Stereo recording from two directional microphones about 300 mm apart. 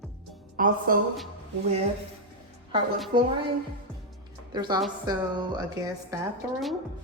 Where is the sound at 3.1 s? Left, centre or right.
Centre.